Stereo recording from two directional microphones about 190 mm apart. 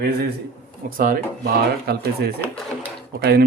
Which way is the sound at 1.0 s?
50° right (ahead or behind).